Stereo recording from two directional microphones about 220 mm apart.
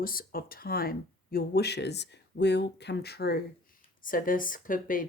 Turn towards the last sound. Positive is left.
turn(degrees=40)  # may be behind; listen again after turning